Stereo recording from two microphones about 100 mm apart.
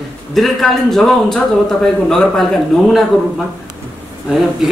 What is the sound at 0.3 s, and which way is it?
Speech, 5° left (ahead or behind).